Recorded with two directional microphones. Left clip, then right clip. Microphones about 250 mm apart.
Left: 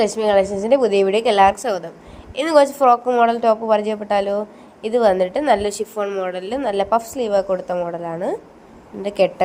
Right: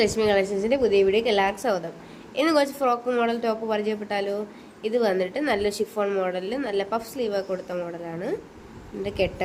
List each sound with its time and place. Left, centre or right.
0.0 s a woman's voice: centre